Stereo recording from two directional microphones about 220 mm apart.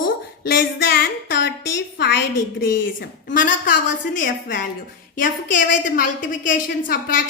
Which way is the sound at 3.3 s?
35° left (ahead or behind).